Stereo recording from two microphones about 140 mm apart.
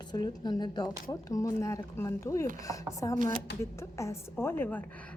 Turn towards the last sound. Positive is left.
turn(degrees=15)  # may be behind; listen again after turning